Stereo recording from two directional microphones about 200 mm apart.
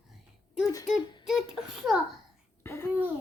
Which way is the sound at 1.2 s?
5° right (ahead or behind).